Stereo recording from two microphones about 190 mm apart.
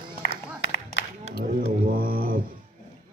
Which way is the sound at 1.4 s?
50° right (ahead or behind).